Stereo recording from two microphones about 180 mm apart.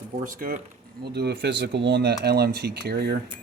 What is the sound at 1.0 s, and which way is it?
Speech, 65° right (ahead or behind).